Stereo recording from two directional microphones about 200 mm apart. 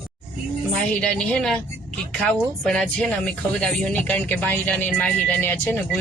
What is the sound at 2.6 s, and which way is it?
Speech, 5° left (ahead or behind).